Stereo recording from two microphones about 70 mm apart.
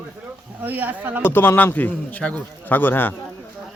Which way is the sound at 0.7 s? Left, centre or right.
Right.